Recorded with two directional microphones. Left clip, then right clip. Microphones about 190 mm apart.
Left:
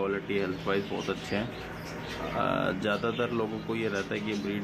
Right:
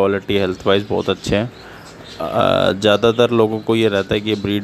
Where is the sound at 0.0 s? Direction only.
60° right (ahead or behind).